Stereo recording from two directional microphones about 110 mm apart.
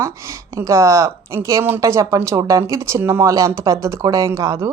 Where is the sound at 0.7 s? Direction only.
25° right (ahead or behind).